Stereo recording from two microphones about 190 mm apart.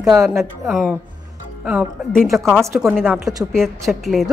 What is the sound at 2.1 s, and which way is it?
A woman's voice, centre (ahead or behind).